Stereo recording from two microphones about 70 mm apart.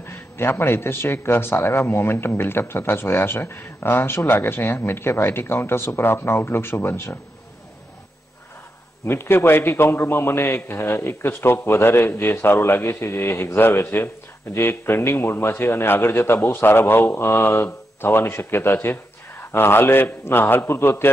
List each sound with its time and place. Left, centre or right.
0.0 s a man's voice: left
9.0 s a man's voice: left